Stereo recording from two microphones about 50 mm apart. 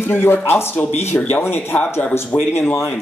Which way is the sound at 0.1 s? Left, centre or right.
Left.